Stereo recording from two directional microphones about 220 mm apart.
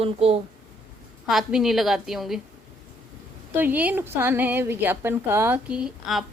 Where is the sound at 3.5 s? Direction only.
10° right (ahead or behind).